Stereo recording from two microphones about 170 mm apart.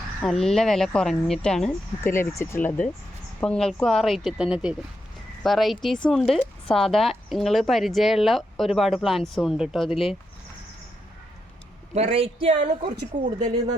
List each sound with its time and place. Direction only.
0.2 s speech: 5° left (ahead or behind)
2.0 s speech: 15° left (ahead or behind)
11.9 s speech: 35° right (ahead or behind)